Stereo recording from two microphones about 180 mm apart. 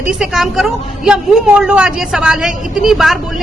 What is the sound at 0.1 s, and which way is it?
A woman's voice, 5° right (ahead or behind).